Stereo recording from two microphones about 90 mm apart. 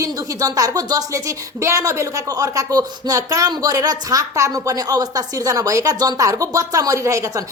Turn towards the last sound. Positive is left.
turn(degrees=-35)  # may be behind; listen again after turning